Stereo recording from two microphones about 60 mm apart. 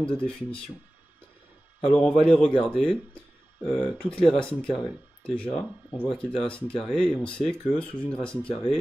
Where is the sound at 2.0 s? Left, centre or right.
Centre.